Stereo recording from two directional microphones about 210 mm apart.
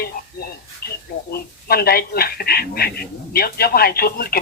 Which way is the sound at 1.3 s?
45° left (ahead or behind).